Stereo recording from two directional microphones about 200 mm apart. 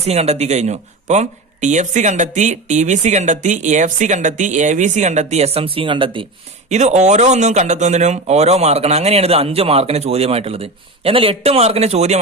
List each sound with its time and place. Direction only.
0.0 s speech: 30° right (ahead or behind)
6.7 s speech: 35° right (ahead or behind)